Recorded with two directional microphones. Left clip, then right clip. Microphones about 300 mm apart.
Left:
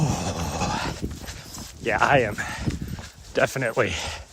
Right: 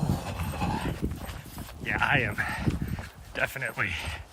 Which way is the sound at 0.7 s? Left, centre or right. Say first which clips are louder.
Left 5 dB; centre.